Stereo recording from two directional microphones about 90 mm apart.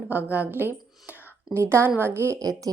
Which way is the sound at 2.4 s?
40° right (ahead or behind).